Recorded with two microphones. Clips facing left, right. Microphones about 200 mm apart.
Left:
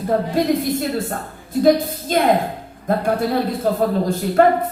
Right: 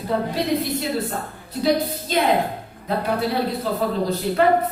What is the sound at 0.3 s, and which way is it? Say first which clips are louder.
Speech: left 4 dB; 50° left (ahead or behind).